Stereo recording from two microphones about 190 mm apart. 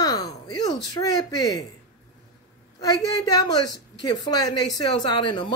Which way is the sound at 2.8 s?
20° left (ahead or behind).